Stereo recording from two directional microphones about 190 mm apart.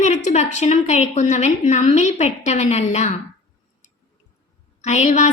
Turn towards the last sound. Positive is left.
turn(degrees=35)  # may be behind; listen again after turning